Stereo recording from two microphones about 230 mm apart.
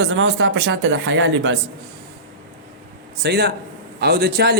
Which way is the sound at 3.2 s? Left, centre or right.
Right.